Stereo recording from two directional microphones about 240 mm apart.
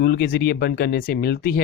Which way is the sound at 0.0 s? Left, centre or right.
Left.